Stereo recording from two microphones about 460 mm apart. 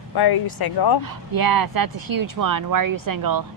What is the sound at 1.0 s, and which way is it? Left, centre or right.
Speech, right.